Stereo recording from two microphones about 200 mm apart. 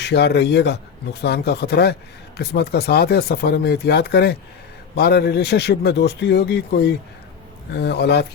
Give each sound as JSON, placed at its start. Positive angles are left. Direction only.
{"t": 0.0, "sound": "a man's voice", "side_deg": 55}